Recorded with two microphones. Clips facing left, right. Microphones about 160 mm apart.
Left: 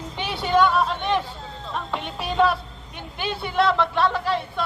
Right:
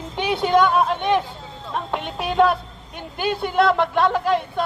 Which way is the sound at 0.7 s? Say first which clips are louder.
Right 3 dB; 50° right (ahead or behind).